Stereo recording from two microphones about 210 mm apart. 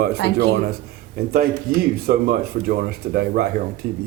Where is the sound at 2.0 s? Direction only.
45° right (ahead or behind).